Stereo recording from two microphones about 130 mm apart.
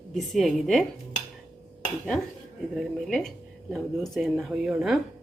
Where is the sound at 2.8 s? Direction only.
Centre (ahead or behind).